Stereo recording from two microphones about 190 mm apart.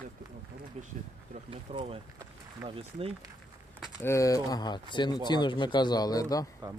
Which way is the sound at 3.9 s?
15° left (ahead or behind).